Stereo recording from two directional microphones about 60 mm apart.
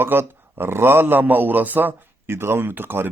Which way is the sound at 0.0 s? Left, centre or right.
Right.